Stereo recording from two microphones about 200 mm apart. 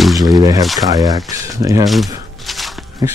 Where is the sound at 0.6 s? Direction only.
Centre (ahead or behind).